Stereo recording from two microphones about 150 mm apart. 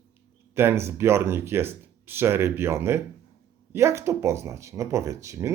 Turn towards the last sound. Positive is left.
turn(degrees=-20)  # may be behind; listen again after turning